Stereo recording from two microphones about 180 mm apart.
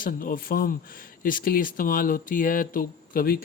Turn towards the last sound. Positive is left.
turn(degrees=50)  # may be behind; listen again after turning